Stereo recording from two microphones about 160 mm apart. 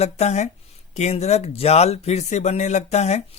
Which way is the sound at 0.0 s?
45° left (ahead or behind).